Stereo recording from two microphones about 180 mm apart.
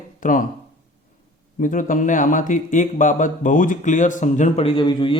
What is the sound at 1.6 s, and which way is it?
Speech, 50° left (ahead or behind).